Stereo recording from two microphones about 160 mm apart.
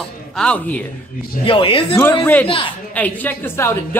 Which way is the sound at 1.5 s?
35° left (ahead or behind).